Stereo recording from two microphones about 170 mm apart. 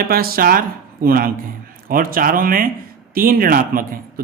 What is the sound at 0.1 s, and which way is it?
A man's voice, 60° right (ahead or behind).